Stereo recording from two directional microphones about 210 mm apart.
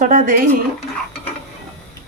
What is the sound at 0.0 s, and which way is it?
Speech, 40° right (ahead or behind).